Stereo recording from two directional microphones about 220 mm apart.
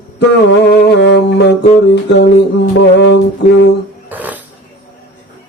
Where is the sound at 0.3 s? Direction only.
50° left (ahead or behind).